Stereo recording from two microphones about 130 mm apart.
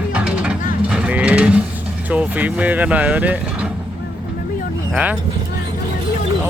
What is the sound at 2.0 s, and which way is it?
Speech, 10° right (ahead or behind).